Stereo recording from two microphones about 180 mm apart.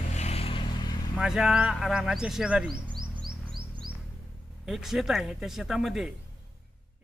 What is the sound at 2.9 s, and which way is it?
Music, 25° right (ahead or behind).